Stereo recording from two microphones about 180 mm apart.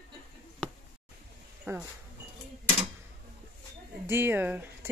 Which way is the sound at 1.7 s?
15° right (ahead or behind).